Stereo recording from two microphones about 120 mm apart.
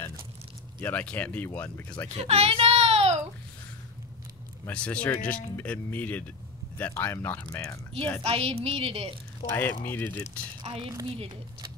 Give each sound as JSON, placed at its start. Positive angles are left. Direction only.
{"t": 0.7, "sound": "speech", "side_deg": 15}
{"t": 2.1, "sound": "child singing", "side_deg": -60}
{"t": 4.6, "sound": "speech", "side_deg": 10}
{"t": 8.2, "sound": "a woman's voice", "side_deg": -55}
{"t": 9.5, "sound": "speech", "side_deg": 15}
{"t": 10.6, "sound": "a woman's voice", "side_deg": -45}